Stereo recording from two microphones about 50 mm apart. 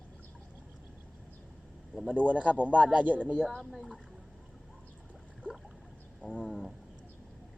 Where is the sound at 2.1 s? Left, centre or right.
Right.